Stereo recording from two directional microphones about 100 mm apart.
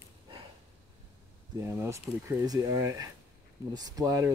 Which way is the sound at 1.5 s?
25° right (ahead or behind).